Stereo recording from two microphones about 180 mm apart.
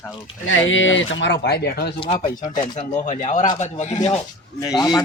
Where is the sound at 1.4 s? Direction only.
65° left (ahead or behind).